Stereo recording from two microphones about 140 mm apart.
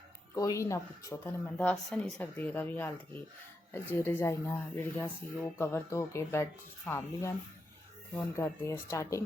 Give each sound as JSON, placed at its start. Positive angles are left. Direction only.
{"t": 0.3, "sound": "speech", "side_deg": 25}
{"t": 1.5, "sound": "speech", "side_deg": 5}